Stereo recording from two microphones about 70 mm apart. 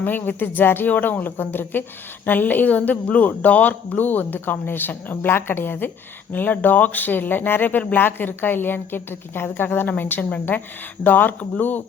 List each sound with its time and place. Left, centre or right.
0.0 s a woman's voice: left